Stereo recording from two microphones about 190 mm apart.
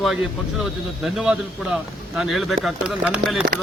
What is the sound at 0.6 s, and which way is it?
Speech, 5° right (ahead or behind).